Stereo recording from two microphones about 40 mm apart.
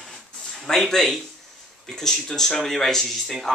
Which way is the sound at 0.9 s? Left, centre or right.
Centre.